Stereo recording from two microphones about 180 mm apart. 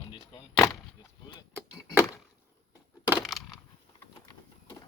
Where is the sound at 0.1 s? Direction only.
30° left (ahead or behind).